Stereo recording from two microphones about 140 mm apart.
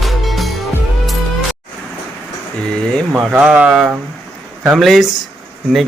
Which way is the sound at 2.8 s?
5° left (ahead or behind).